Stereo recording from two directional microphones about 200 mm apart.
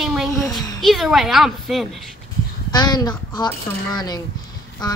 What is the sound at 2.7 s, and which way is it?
Speech, 20° left (ahead or behind).